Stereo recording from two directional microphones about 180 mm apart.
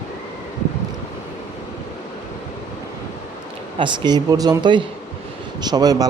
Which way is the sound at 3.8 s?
25° right (ahead or behind).